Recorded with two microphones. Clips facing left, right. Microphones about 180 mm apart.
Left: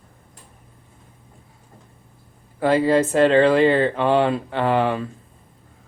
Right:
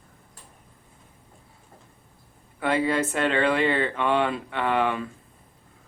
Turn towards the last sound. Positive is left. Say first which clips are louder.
# left 5 dB
turn(degrees=35)  # may be behind; listen again after turning